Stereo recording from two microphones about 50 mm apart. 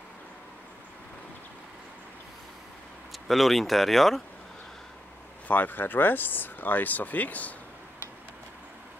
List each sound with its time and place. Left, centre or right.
3.3 s speech: centre
5.5 s speech: left